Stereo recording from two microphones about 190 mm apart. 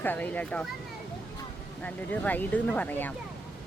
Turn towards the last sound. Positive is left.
turn(degrees=10)  # may be behind; listen again after turning